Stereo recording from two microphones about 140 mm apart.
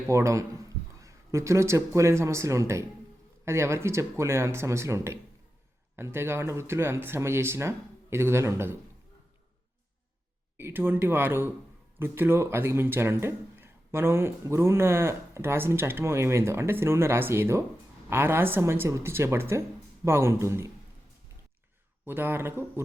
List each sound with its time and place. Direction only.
0.1 s speech: 20° right (ahead or behind)
10.6 s speech: 15° right (ahead or behind)
22.0 s speech: 15° right (ahead or behind)